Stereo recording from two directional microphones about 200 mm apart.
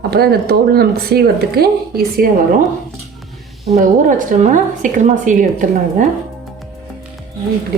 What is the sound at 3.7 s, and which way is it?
A woman's voice, 40° right (ahead or behind).